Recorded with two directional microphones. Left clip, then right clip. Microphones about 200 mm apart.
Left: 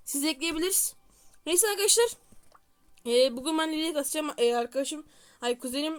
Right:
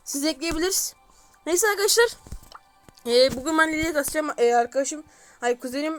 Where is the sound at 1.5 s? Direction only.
Centre (ahead or behind).